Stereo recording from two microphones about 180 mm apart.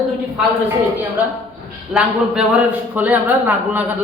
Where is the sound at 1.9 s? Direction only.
5° right (ahead or behind).